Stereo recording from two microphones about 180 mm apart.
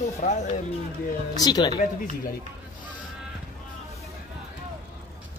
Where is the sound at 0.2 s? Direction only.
45° left (ahead or behind).